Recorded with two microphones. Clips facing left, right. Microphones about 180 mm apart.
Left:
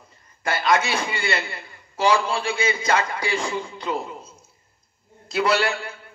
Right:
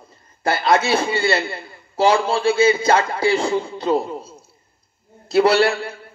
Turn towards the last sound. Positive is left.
turn(degrees=-35)  # may be behind; listen again after turning